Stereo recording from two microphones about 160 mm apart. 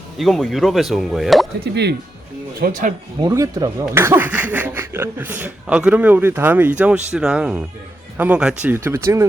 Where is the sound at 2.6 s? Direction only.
60° right (ahead or behind).